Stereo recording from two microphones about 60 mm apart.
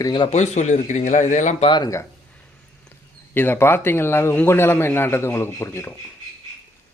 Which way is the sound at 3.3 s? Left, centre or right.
Left.